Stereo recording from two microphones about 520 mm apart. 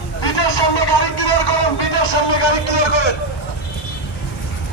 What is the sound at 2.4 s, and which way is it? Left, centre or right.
Speech, left.